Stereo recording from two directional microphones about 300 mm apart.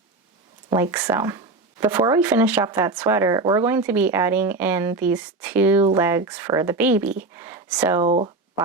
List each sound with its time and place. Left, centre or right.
0.7 s speech: centre
8.0 s speech: centre